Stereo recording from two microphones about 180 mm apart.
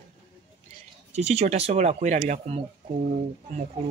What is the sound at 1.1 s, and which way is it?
Speech, 35° right (ahead or behind).